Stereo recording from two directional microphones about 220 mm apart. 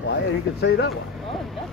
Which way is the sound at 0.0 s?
50° left (ahead or behind).